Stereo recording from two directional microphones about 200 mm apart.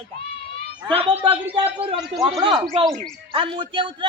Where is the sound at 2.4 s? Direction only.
20° right (ahead or behind).